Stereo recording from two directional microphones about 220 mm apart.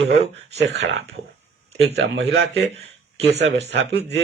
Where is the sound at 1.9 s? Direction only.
50° right (ahead or behind).